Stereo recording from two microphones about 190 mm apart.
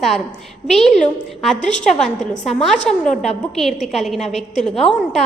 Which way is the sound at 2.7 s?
40° left (ahead or behind).